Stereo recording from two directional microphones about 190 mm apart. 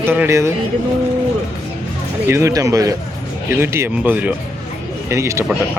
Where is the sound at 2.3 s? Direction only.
15° right (ahead or behind).